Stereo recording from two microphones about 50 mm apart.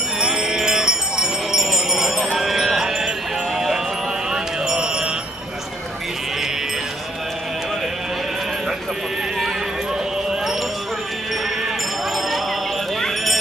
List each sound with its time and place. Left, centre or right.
0.2 s jingle bell: centre
2.3 s music: centre
13.0 s a sound: centre